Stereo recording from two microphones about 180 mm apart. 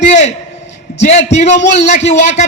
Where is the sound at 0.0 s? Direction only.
40° left (ahead or behind).